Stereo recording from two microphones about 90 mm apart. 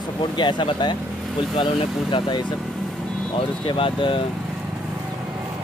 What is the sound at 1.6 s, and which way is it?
Speech, 70° left (ahead or behind).